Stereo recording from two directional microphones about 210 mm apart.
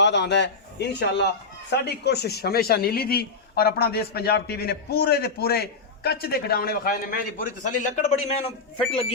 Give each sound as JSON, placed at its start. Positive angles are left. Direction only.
{"t": 0.0, "sound": "a man's voice", "side_deg": 55}